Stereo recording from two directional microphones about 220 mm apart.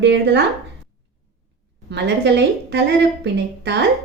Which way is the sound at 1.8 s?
50° right (ahead or behind).